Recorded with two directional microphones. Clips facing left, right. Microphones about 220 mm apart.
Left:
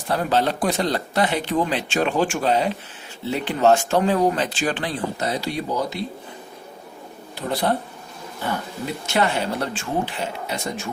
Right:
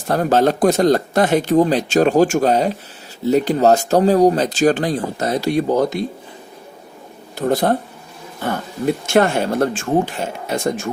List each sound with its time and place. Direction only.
0.1 s speech: 45° right (ahead or behind)
7.3 s speech: 45° right (ahead or behind)
9.1 s speech: 50° right (ahead or behind)